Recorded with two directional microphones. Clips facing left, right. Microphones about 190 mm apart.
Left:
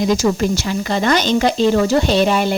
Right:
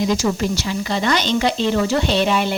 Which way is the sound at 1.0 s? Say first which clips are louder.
Left 4 dB; 45° left (ahead or behind).